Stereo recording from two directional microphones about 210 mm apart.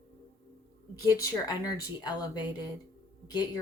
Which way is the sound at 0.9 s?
15° left (ahead or behind).